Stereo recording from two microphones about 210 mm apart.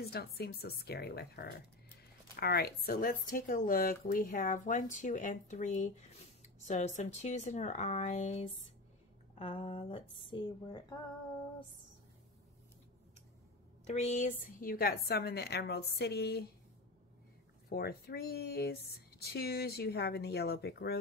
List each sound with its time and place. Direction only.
0.0 s a woman's voice: 50° left (ahead or behind); by 11.0 s 25° left (ahead or behind)
13.8 s a woman's voice: 35° left (ahead or behind); by 16.4 s 50° left (ahead or behind)
17.6 s a woman's voice: 45° left (ahead or behind)